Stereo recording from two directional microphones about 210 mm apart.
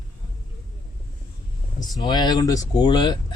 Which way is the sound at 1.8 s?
20° left (ahead or behind).